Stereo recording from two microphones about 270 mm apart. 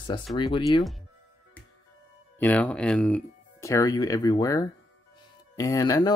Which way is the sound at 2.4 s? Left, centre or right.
Centre.